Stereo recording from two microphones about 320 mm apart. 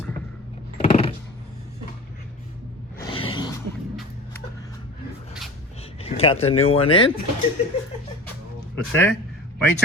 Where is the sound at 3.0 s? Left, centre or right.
Centre.